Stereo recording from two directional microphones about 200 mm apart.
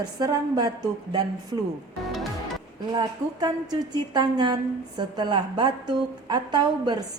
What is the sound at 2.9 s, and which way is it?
A woman's voice, 20° right (ahead or behind).